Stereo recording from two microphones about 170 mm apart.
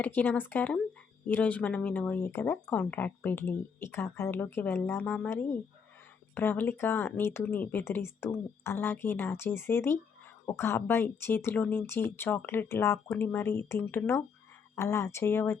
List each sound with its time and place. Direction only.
0.0 s speech: 10° left (ahead or behind)